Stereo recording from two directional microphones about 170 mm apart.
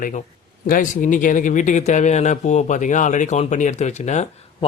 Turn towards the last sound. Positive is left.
turn(degrees=40)  # may be behind; listen again after turning